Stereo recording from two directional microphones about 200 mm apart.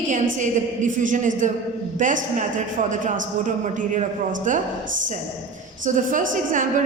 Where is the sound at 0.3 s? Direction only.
40° right (ahead or behind).